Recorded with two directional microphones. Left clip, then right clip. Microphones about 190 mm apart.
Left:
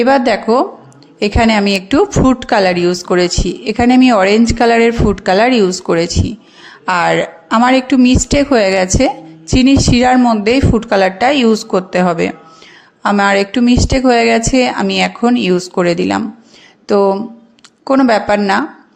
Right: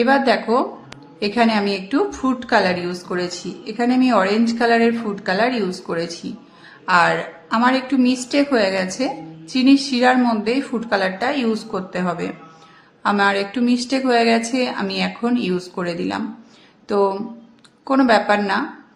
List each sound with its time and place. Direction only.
0.3 s a woman's voice: 40° left (ahead or behind)